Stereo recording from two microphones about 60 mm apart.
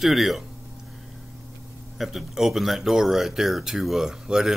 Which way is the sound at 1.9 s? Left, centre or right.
Centre.